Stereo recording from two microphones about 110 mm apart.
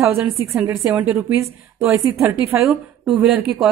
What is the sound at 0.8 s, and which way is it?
Speech, 10° right (ahead or behind).